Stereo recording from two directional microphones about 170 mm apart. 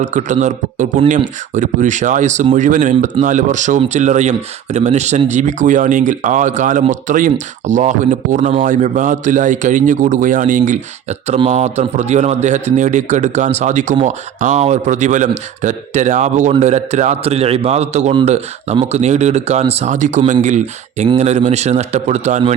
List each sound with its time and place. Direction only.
0.0 s speech: 45° right (ahead or behind)